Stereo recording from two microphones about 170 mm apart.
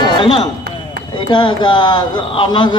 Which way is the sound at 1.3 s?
25° left (ahead or behind).